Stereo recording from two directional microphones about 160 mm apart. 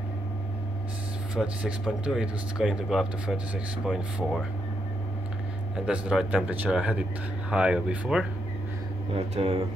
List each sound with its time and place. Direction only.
1.3 s speech: 5° right (ahead or behind)
5.9 s speech: 5° right (ahead or behind)
9.1 s speech: 35° right (ahead or behind)